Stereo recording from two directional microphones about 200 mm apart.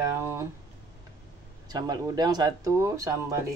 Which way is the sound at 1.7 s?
20° right (ahead or behind).